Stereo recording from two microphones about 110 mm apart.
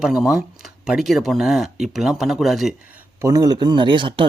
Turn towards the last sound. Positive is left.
turn(degrees=-50)  # may be behind; listen again after turning